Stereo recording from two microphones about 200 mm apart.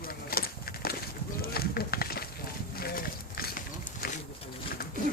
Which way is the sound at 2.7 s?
50° left (ahead or behind).